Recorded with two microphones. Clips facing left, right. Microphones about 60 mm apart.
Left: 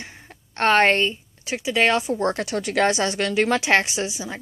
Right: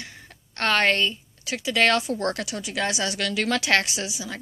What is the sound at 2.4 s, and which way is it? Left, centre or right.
A woman's voice, left.